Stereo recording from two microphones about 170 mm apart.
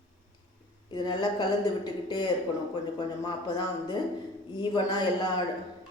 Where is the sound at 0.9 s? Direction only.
25° left (ahead or behind).